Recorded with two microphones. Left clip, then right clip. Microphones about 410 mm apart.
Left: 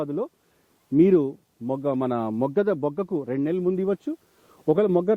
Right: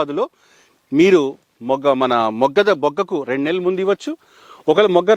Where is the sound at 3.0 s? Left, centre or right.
Centre.